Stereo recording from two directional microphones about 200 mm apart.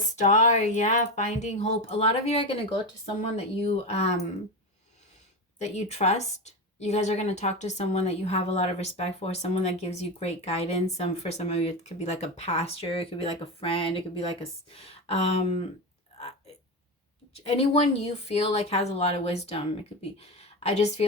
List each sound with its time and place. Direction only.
0.2 s a woman's voice: 35° left (ahead or behind)
5.7 s a woman's voice: 35° left (ahead or behind)
17.3 s a woman's voice: 30° left (ahead or behind)